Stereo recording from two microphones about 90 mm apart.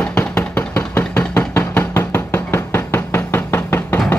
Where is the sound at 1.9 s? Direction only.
30° left (ahead or behind).